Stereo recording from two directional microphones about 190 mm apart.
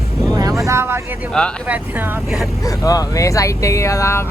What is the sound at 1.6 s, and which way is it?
Speech, 10° right (ahead or behind).